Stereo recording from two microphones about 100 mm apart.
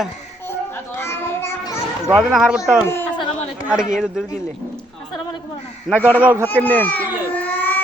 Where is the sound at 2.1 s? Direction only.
5° right (ahead or behind).